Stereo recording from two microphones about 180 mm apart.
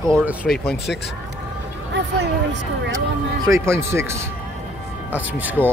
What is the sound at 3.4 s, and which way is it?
Speech, 15° right (ahead or behind).